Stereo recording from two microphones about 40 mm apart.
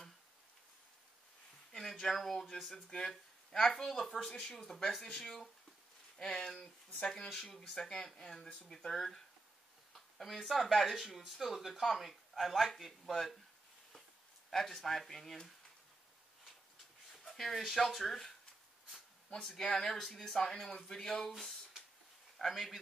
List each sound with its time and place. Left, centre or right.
1.7 s speech: centre
14.5 s speech: centre
17.1 s speech: centre
18.9 s a sound: centre
19.8 s speech: centre
21.4 s a sound: centre
22.4 s speech: centre